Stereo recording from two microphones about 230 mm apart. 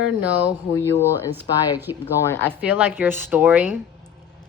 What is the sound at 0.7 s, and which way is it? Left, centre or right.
Speech, centre.